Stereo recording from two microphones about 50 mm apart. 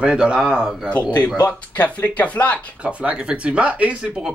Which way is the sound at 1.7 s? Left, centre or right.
Left.